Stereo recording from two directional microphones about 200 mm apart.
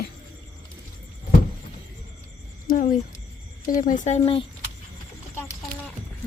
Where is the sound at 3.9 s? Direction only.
40° left (ahead or behind).